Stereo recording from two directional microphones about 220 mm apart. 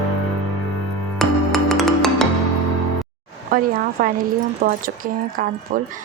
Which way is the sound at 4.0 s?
35° right (ahead or behind).